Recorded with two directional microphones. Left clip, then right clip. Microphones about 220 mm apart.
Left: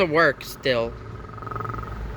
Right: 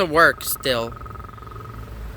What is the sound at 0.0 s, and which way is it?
Speech, 25° right (ahead or behind).